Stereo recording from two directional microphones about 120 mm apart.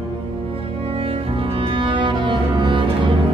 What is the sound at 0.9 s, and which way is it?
Cello, 50° right (ahead or behind).